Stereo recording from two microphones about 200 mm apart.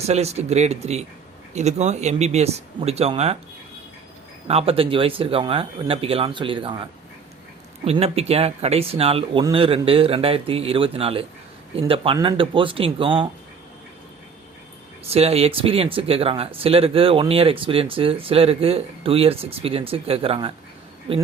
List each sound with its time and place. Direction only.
0.1 s speech: 30° right (ahead or behind)
4.4 s speech: 30° right (ahead or behind)
7.9 s speech: 30° right (ahead or behind)
15.0 s speech: 30° right (ahead or behind)